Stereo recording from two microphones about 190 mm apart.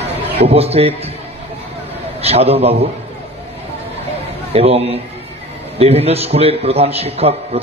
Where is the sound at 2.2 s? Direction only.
30° right (ahead or behind).